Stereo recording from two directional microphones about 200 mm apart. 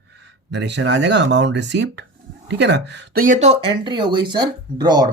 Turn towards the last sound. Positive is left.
turn(degrees=-20)  # may be behind; listen again after turning